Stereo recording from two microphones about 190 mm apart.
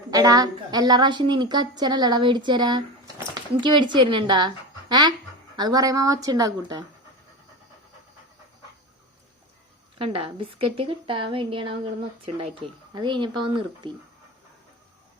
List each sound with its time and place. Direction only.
0.1 s a woman's voice: 20° right (ahead or behind)
10.0 s a woman's voice: 30° right (ahead or behind)